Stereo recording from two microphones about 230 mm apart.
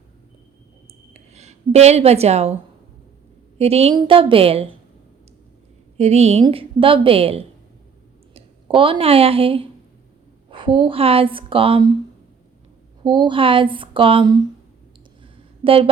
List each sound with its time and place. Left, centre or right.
1.1 s speech: right
3.6 s a woman's voice: right
6.0 s a woman's voice: right
13.0 s a woman's voice: centre
15.2 s a sound: right